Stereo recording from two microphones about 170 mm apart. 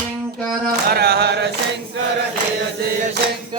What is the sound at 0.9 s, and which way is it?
Chant, 70° right (ahead or behind).